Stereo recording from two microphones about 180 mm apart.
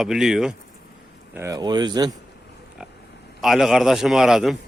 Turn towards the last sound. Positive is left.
turn(degrees=-5)  # may be behind; listen again after turning